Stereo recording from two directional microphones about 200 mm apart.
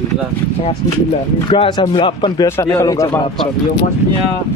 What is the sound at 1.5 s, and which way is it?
Speech, 25° left (ahead or behind).